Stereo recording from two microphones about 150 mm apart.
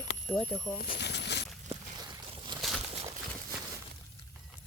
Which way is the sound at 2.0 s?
25° right (ahead or behind).